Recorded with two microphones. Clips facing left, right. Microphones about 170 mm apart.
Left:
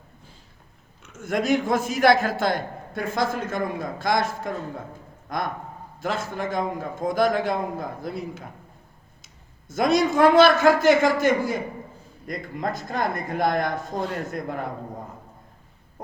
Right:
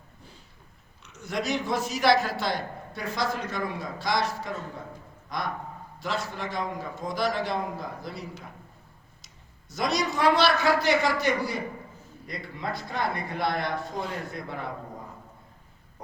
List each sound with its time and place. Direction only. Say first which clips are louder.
1.0 s a man's voice: left 6 dB; 50° left (ahead or behind)